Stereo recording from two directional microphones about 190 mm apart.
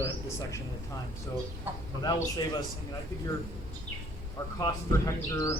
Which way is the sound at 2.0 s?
20° left (ahead or behind).